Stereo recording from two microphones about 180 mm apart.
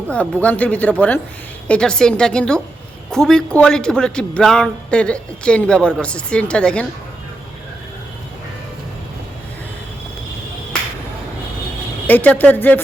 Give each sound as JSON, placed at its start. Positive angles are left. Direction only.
{"t": 0.1, "sound": "speech", "side_deg": 10}
{"t": 12.0, "sound": "speech", "side_deg": 10}